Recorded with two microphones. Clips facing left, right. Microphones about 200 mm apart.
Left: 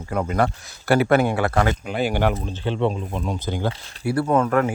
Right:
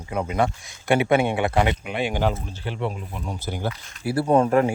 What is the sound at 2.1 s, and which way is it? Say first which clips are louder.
Speech: left 2 dB; 70° left (ahead or behind).